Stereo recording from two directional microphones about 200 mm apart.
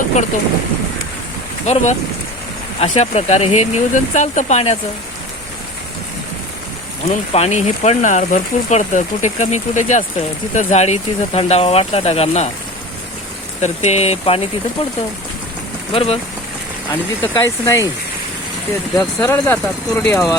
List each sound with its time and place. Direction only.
1.6 s speech: 35° left (ahead or behind)
7.1 s speech: 35° left (ahead or behind)
13.6 s speech: 35° left (ahead or behind)
16.9 s speech: 15° left (ahead or behind)
18.9 s speech: 10° left (ahead or behind)